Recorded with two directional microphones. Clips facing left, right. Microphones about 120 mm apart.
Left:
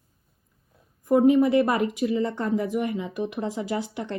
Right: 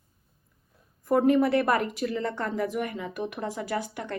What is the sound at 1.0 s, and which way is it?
A woman's voice, 15° left (ahead or behind).